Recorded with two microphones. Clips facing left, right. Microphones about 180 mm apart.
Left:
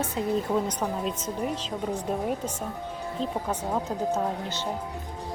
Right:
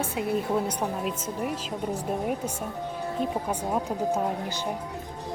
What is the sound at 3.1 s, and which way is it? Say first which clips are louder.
Speech: even; 10° right (ahead or behind).